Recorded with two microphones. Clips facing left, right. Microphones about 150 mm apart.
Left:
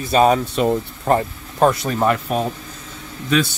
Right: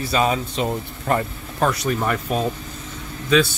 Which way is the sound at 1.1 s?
35° left (ahead or behind).